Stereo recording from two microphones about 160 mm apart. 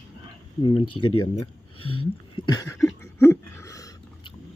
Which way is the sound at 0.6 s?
30° left (ahead or behind).